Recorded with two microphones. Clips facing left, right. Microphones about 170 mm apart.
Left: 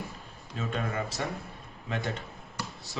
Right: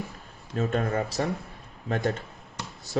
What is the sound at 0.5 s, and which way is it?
Speech, 40° right (ahead or behind).